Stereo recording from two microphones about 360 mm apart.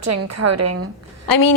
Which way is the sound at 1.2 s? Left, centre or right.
Left.